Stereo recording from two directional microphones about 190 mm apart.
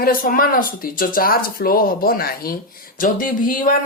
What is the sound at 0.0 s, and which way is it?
A man's voice, 50° left (ahead or behind).